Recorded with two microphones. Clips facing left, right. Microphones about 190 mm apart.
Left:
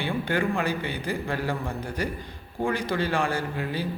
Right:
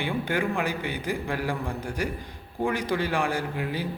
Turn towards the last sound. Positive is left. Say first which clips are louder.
# even
turn(degrees=-15)  # may be behind; listen again after turning